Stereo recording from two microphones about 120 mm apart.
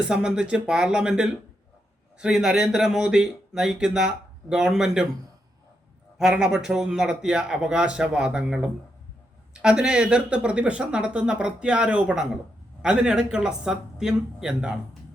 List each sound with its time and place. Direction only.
0.0 s speech: 5° right (ahead or behind)
6.1 s speech: 5° right (ahead or behind)